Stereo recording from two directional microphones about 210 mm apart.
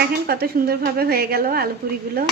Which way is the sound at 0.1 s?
50° right (ahead or behind).